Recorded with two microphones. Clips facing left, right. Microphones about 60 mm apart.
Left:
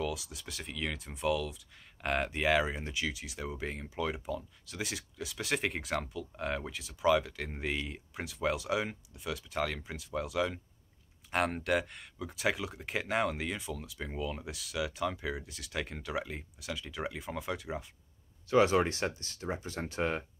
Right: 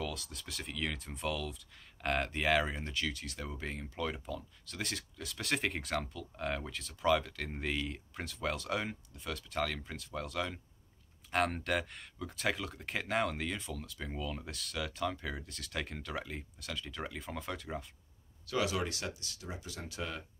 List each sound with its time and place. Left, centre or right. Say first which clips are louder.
0.0 s speech: left 4 dB; centre
18.5 s speech: left 8 dB; left